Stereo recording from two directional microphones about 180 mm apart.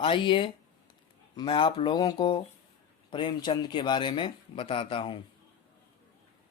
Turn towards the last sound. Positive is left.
turn(degrees=30)  # may be behind; listen again after turning